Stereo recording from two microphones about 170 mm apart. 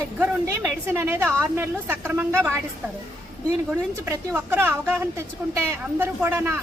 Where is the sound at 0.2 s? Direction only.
15° right (ahead or behind).